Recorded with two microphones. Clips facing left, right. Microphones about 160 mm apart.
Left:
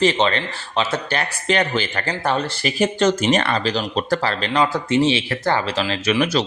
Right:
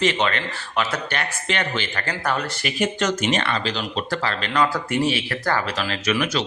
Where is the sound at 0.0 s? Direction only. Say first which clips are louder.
Left 4 dB; 30° left (ahead or behind).